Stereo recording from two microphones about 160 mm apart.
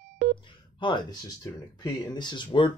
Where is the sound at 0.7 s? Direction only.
30° left (ahead or behind).